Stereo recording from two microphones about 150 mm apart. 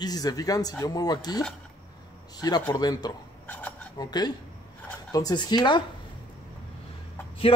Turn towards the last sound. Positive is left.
turn(degrees=40)  # may be behind; listen again after turning